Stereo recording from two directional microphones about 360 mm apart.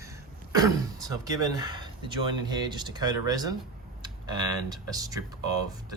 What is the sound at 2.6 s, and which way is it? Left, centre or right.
Speech, centre.